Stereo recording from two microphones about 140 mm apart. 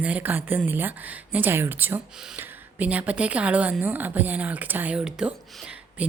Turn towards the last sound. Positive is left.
turn(degrees=-5)  # may be behind; listen again after turning